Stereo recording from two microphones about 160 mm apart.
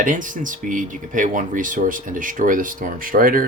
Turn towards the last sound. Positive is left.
turn(degrees=-60)  # may be behind; listen again after turning